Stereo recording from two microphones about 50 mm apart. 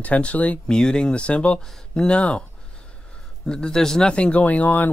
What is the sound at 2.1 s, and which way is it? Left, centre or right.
Speech, left.